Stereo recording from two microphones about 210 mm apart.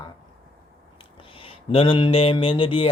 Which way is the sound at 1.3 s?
25° left (ahead or behind).